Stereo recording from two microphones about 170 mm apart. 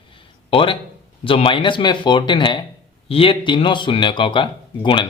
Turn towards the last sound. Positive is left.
turn(degrees=30)  # may be behind; listen again after turning